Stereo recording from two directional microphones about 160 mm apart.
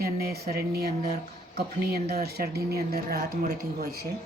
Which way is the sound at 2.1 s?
80° right.